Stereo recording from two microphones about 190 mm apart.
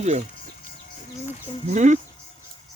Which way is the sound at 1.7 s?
40° right (ahead or behind).